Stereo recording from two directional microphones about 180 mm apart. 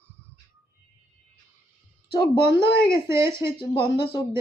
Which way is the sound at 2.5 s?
15° right (ahead or behind).